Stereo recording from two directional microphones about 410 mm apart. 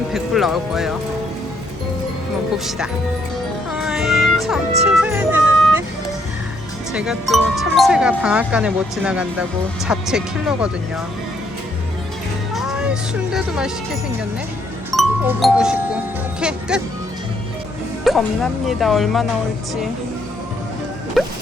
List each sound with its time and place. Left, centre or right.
0.1 s speech: centre
2.6 s speech: centre
3.7 s music: centre
6.9 s speech: centre
12.5 s speech: centre
14.9 s speech: centre
18.0 s music: centre
18.7 s speech: centre
21.2 s music: centre